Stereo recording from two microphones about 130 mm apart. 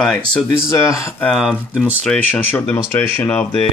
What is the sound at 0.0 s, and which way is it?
Speech, 5° left (ahead or behind).